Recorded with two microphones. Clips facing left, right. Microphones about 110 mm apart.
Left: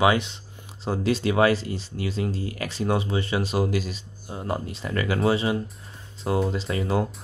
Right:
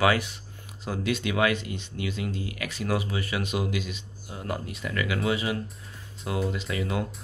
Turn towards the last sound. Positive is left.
turn(degrees=35)  # may be behind; listen again after turning